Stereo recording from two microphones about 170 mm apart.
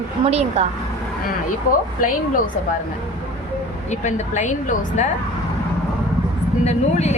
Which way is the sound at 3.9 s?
45° left (ahead or behind).